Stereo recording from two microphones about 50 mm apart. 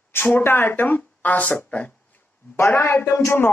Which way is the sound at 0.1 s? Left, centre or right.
Left.